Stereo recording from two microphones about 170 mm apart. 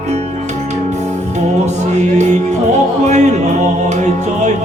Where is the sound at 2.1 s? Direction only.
40° right (ahead or behind).